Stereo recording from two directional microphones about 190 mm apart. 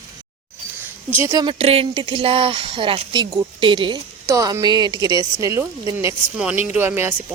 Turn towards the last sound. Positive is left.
turn(degrees=-10)  # may be behind; listen again after turning